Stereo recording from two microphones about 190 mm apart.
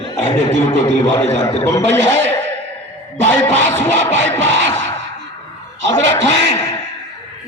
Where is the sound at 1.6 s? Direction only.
10° left (ahead or behind).